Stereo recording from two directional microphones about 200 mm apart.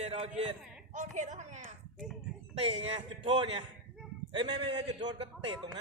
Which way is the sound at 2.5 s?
30° right (ahead or behind).